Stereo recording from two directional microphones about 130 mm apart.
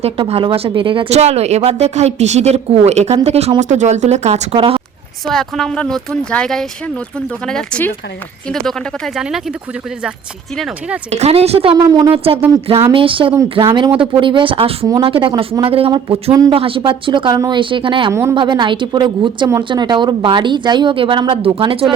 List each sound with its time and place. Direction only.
0.0 s a woman's voice: 50° right (ahead or behind)
1.1 s a woman's voice: 60° right (ahead or behind)
3.6 s a woman's voice: 65° right (ahead or behind)
4.5 s a woman's voice: 45° right (ahead or behind)
5.2 s speech: 5° left (ahead or behind)
10.6 s speech: 10° right (ahead or behind)
11.1 s a woman's voice: 55° right (ahead or behind)
11.9 s speech: 30° right (ahead or behind)
12.1 s a woman's voice: 45° right (ahead or behind)
18.1 s speech: 20° right (ahead or behind)
18.3 s a woman's voice: 35° right (ahead or behind)